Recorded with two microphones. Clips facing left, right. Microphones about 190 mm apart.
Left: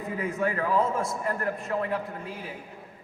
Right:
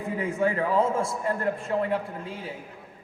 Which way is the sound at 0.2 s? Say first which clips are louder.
Right 3 dB; 30° right (ahead or behind).